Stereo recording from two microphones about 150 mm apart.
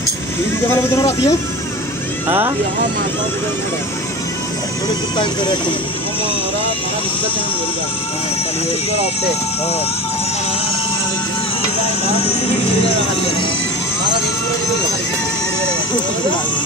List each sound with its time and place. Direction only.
0.7 s speech: 20° left (ahead or behind)
2.2 s speech: 15° right (ahead or behind)
5.1 s speech: 30° left (ahead or behind)